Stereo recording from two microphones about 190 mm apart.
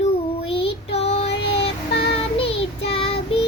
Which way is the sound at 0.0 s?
30° left (ahead or behind).